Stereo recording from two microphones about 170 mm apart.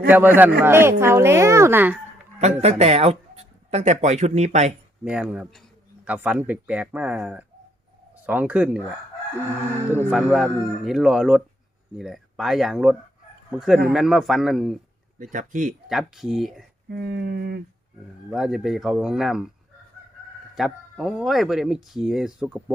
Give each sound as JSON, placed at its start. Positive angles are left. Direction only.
{"t": 0.1, "sound": "a woman's voice", "side_deg": -10}
{"t": 2.4, "sound": "speech", "side_deg": -40}
{"t": 5.0, "sound": "a woman's voice", "side_deg": -5}
{"t": 10.1, "sound": "speech", "side_deg": -5}
{"t": 15.2, "sound": "speech", "side_deg": -50}
{"t": 15.9, "sound": "speech", "side_deg": 0}
{"t": 16.9, "sound": "speech", "side_deg": -80}
{"t": 18.3, "sound": "speech", "side_deg": 0}
{"t": 20.6, "sound": "speech", "side_deg": 0}